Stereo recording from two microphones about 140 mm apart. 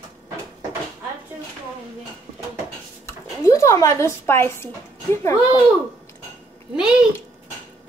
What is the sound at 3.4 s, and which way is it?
A woman's voice, 20° left (ahead or behind).